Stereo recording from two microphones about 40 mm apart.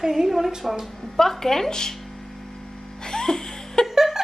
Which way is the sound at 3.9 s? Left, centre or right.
Centre.